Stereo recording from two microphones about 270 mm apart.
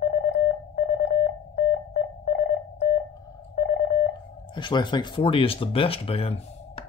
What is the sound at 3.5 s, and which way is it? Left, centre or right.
Telephone dialing, left.